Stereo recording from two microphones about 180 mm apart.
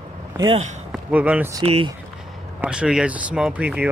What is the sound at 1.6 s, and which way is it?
Speech, 35° right (ahead or behind).